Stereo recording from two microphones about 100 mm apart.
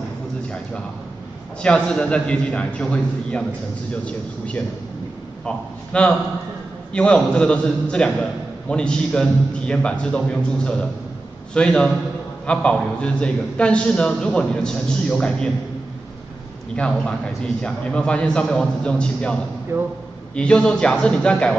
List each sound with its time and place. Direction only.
1.6 s a man's voice: 10° left (ahead or behind)
5.4 s a man's voice: 10° left (ahead or behind)
16.7 s a man's voice: 10° left (ahead or behind)
19.7 s a man's voice: 25° right (ahead or behind)
20.3 s a man's voice: 10° left (ahead or behind)